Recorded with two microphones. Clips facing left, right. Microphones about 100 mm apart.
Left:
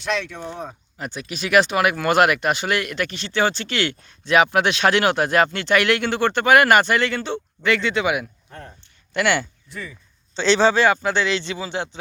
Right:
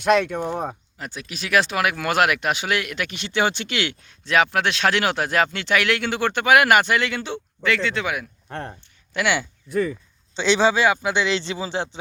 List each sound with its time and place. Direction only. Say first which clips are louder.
0.0 s speech: right 7 dB; 50° right (ahead or behind)
0.9 s speech: left 3 dB; centre (ahead or behind)
7.6 s speech: left 2 dB; centre (ahead or behind)
8.4 s speech: right 7 dB; 75° right (ahead or behind)
9.1 s speech: left 2 dB; 5° right (ahead or behind)
9.6 s speech: right 13 dB; 50° right (ahead or behind)
10.3 s a man's voice: left 2 dB; 10° right (ahead or behind)
11.3 s speech: even; 25° right (ahead or behind)